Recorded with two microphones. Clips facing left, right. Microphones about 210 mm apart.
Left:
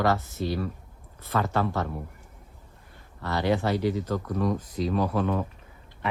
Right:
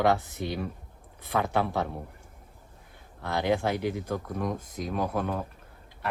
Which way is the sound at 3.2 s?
10° right (ahead or behind).